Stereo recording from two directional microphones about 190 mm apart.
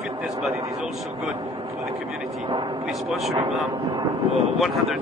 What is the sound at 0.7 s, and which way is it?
Speech, centre (ahead or behind).